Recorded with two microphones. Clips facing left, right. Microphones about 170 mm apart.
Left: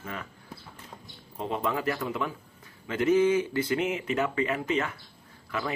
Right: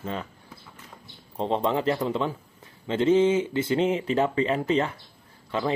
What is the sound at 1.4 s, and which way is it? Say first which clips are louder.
Speech: right 5 dB; 25° right (ahead or behind).